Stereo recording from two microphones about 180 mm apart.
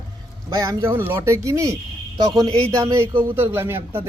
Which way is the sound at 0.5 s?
20° right (ahead or behind).